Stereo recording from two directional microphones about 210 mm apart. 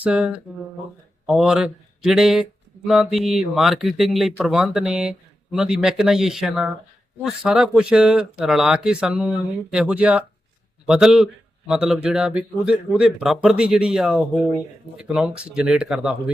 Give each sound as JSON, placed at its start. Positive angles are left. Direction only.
{"t": 0.0, "sound": "speech", "side_deg": -5}